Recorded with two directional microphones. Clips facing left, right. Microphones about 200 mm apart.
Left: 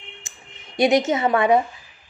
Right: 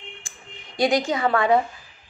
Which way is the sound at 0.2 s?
20° left (ahead or behind).